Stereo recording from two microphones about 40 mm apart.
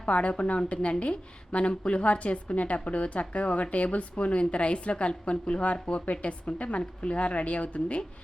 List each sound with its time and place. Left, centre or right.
0.0 s a woman's voice: left